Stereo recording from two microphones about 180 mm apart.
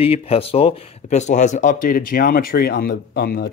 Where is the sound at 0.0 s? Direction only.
30° left (ahead or behind).